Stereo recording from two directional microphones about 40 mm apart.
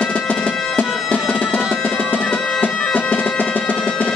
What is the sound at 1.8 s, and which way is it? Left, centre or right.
Music, left.